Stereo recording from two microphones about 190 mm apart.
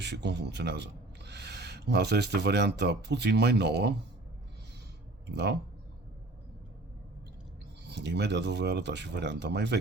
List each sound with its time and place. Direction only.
0.0 s a man's voice: 65° right (ahead or behind)
5.2 s speech: 60° right (ahead or behind)
7.9 s speech: 60° right (ahead or behind)